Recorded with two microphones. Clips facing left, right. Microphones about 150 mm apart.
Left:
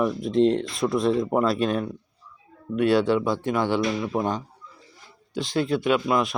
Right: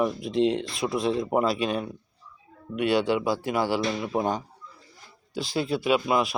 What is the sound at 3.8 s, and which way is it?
Speech, 20° right (ahead or behind).